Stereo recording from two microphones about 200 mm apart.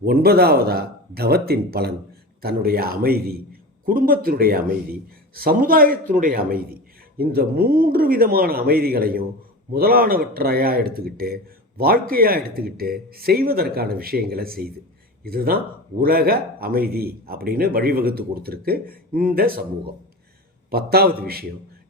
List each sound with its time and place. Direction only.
0.0 s a man's voice: 50° right (ahead or behind)
20.7 s a man's voice: 50° right (ahead or behind)